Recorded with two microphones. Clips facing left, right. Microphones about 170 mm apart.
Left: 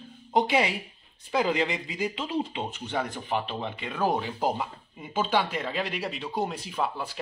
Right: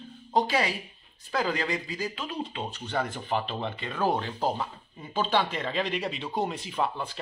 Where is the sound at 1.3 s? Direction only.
20° left (ahead or behind).